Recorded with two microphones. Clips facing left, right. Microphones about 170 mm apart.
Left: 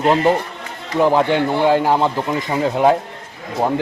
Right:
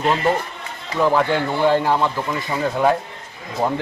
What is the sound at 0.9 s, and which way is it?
A man's voice, 20° left (ahead or behind).